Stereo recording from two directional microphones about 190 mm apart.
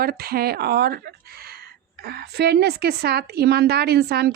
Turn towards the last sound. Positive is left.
turn(degrees=-55)  # may be behind; listen again after turning